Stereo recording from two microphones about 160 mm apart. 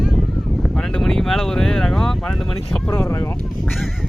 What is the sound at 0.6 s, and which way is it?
Speech, 5° left (ahead or behind).